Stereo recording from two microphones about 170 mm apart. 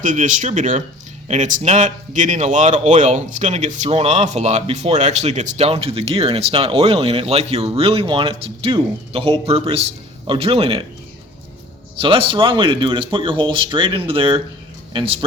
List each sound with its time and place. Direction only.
0.0 s a man's voice: 50° right (ahead or behind); by 10.8 s 30° right (ahead or behind)
11.9 s a man's voice: 30° right (ahead or behind)